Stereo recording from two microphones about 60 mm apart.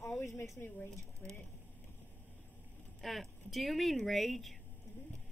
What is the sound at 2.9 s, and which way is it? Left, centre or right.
Speech, centre.